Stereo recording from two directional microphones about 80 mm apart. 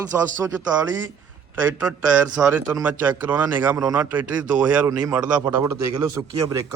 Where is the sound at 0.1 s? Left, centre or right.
Right.